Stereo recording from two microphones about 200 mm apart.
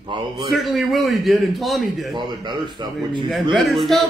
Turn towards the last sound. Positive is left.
turn(degrees=0)  # may be behind; listen again after turning